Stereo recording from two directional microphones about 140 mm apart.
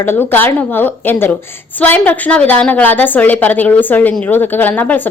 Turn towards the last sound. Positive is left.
turn(degrees=10)  # may be behind; listen again after turning